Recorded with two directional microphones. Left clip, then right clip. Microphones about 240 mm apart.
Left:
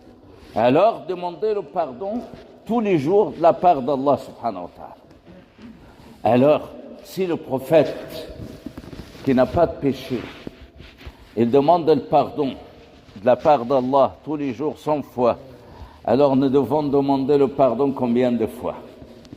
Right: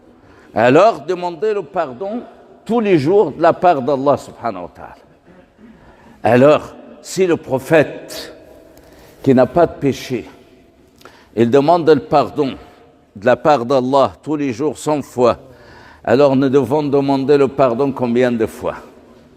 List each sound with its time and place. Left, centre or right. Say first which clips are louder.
0.5 s a man's voice: right 6 dB; right
6.2 s a man's voice: right 6 dB; right
9.2 s a man's voice: right 6 dB; right
11.3 s a man's voice: right 4 dB; right